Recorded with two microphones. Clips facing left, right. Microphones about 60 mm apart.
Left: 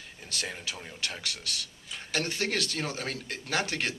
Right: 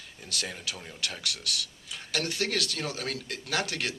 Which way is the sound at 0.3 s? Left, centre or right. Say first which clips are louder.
Even; left.